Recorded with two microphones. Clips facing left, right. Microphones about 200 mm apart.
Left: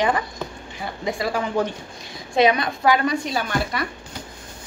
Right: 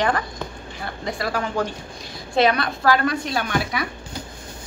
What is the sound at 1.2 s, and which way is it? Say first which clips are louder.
A woman's voice: left 1 dB; 20° left (ahead or behind).